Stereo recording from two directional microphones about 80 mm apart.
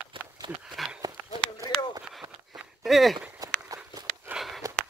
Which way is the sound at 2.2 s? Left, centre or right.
Right.